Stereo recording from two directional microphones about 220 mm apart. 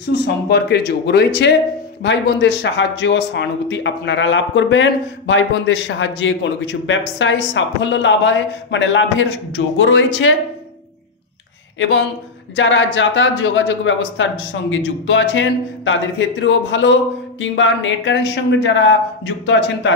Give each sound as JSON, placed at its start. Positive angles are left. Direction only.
{"t": 0.1, "sound": "speech", "side_deg": 50}
{"t": 12.5, "sound": "speech", "side_deg": 55}